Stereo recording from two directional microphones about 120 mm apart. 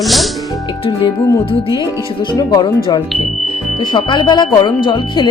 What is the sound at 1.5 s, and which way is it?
Speech, 50° left (ahead or behind).